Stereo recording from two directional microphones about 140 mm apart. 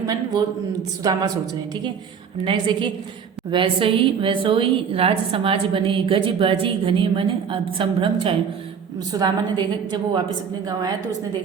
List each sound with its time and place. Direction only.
0.0 s a man's voice: 25° right (ahead or behind)
2.4 s a woman's voice: 35° right (ahead or behind)